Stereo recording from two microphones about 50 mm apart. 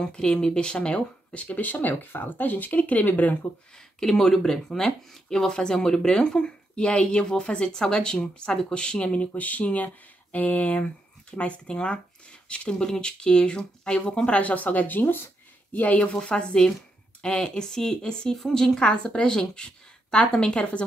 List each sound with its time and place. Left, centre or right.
0.0 s speech: centre; by 3.3 s left
3.7 s speech: centre; by 15.3 s left
15.7 s speech: left
16.1 s speech: centre
18.3 s speech: centre